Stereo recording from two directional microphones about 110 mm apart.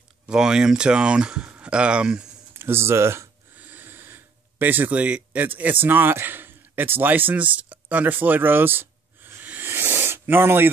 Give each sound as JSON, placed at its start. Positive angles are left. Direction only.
{"t": 0.3, "sound": "speech", "side_deg": -5}
{"t": 2.5, "sound": "gasp", "side_deg": -20}
{"t": 7.7, "sound": "a sound", "side_deg": -15}